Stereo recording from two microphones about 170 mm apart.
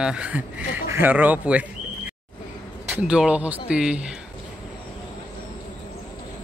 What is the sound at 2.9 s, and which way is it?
Speech, 5° right (ahead or behind).